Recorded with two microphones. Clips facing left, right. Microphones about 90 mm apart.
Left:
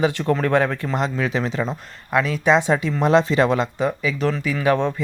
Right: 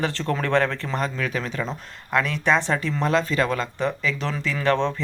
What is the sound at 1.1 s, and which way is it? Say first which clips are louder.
Speech: left 5 dB; 20° left (ahead or behind).